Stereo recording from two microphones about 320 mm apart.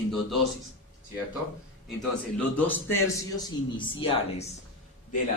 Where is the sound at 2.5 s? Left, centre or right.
Centre.